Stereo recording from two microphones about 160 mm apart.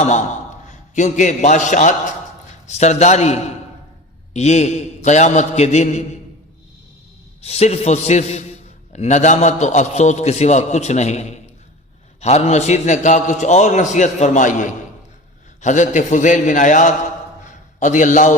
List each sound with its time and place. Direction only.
0.7 s a man's voice: 50° left (ahead or behind)
7.4 s a man's voice: 40° left (ahead or behind)